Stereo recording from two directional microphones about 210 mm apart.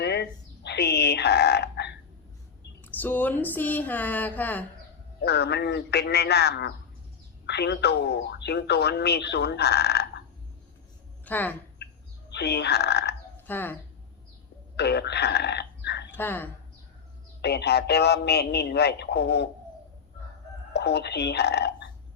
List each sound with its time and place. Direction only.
0.0 s a sound: 55° left (ahead or behind)
2.8 s speech: 10° left (ahead or behind)
5.2 s a man's voice: 50° left (ahead or behind)
11.3 s speech: 10° left (ahead or behind)
12.3 s a man's voice: 50° left (ahead or behind)
13.5 s speech: 10° left (ahead or behind)
14.8 s speech: 55° left (ahead or behind)
16.1 s speech: 10° left (ahead or behind)
17.4 s a man's voice: 50° left (ahead or behind)
20.7 s a man's voice: 50° left (ahead or behind)